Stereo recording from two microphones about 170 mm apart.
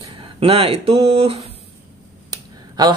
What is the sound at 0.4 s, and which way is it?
Speech, 35° right (ahead or behind).